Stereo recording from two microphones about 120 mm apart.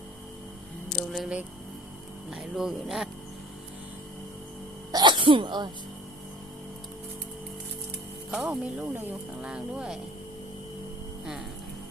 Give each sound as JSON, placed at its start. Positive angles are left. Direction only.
{"t": 1.1, "sound": "speech", "side_deg": 0}
{"t": 4.9, "sound": "speech", "side_deg": -35}
{"t": 8.3, "sound": "speech", "side_deg": -5}